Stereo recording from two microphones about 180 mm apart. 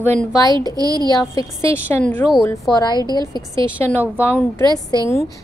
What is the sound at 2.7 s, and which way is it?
Speech, 25° left (ahead or behind).